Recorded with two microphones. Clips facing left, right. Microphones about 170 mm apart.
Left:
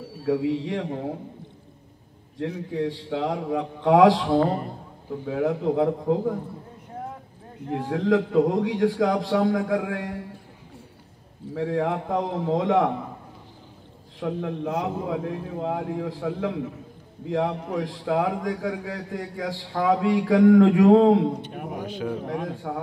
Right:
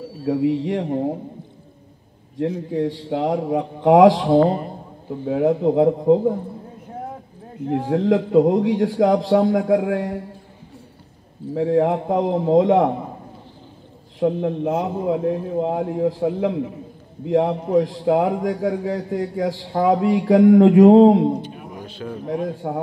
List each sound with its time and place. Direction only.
0.2 s a man's voice: 30° right (ahead or behind)
3.1 s a man's voice: 30° right (ahead or behind)
7.9 s a man's voice: 25° right (ahead or behind)
11.5 s a man's voice: 25° right (ahead or behind)
14.2 s a man's voice: 25° right (ahead or behind)
21.5 s a sound: 65° left (ahead or behind)
21.8 s speech: 15° left (ahead or behind)
22.6 s a man's voice: 25° right (ahead or behind)